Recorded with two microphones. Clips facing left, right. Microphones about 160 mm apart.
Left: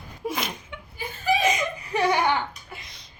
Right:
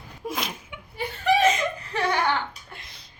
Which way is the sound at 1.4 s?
10° left (ahead or behind).